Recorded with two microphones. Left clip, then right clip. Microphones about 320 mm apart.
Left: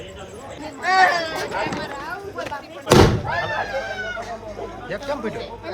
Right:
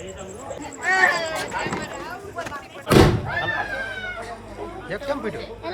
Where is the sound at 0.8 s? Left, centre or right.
Left.